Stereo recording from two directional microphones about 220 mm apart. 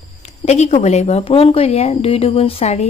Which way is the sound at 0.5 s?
30° left (ahead or behind).